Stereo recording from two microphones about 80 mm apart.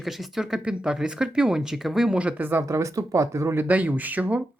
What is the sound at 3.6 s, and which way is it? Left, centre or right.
Speech, right.